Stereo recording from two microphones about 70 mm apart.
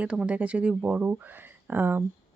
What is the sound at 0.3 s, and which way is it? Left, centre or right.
Speech, centre.